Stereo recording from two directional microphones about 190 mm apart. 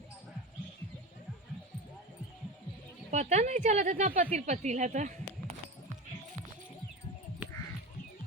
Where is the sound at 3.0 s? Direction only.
35° right (ahead or behind).